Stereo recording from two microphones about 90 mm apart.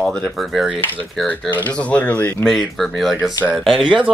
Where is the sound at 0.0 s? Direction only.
5° left (ahead or behind).